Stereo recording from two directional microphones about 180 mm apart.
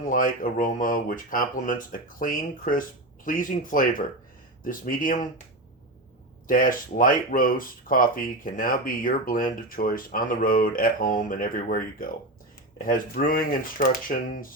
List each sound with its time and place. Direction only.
0.1 s speech: 50° left (ahead or behind)
6.5 s speech: 50° left (ahead or behind)